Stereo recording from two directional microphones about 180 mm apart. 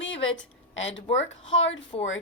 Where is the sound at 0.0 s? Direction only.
90° left.